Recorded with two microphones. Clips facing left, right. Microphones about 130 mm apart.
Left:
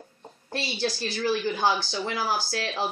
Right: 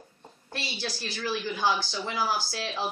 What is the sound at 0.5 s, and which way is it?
A woman's voice, 40° left (ahead or behind).